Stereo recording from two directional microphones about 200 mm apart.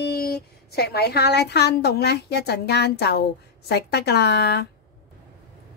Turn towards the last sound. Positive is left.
turn(degrees=55)  # may be behind; listen again after turning